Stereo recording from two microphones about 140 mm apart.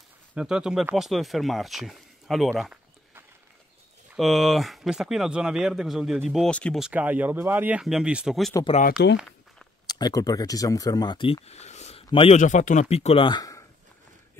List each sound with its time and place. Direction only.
0.3 s speech: 5° right (ahead or behind)
4.1 s speech: centre (ahead or behind)
6.5 s speech: 10° left (ahead or behind)
6.8 s speech: 10° right (ahead or behind)
9.8 s speech: 30° left (ahead or behind)
12.4 s speech: 60° left (ahead or behind); by 13.7 s 25° left (ahead or behind)